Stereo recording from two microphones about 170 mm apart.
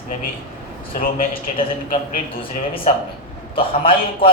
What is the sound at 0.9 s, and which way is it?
Speech, 55° left (ahead or behind).